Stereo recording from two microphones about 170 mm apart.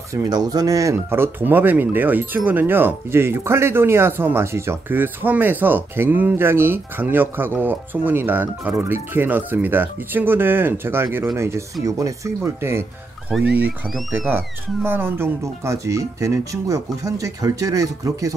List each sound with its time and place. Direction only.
0.1 s speech: 20° right (ahead or behind)